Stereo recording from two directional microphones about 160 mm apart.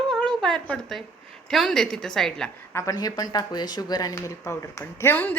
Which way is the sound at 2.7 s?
20° left (ahead or behind).